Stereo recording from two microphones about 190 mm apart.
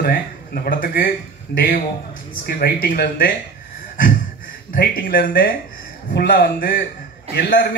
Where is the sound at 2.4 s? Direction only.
55° left (ahead or behind).